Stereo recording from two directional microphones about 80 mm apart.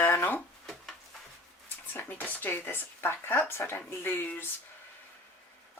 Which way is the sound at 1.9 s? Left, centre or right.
Left.